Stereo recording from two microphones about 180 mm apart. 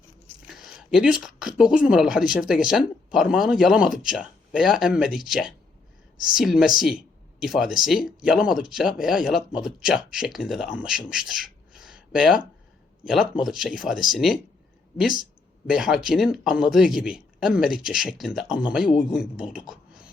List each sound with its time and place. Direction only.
0.4 s speech: centre (ahead or behind)
15.2 s a sound: centre (ahead or behind)
16.0 s speech: centre (ahead or behind)